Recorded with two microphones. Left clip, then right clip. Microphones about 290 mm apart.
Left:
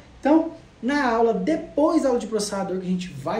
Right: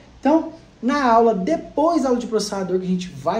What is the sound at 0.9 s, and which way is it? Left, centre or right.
Speech, centre.